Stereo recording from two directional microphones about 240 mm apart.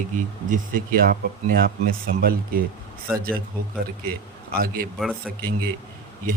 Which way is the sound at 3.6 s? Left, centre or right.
Right.